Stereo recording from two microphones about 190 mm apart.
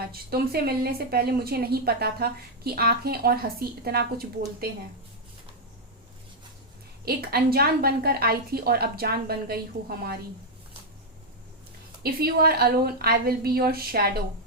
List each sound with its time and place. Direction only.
0.0 s a woman's voice: 55° right (ahead or behind)
7.0 s a woman's voice: 55° right (ahead or behind)
12.0 s a woman's voice: 55° right (ahead or behind)